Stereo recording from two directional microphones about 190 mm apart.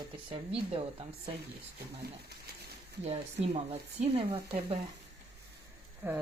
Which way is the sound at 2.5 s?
60° right (ahead or behind).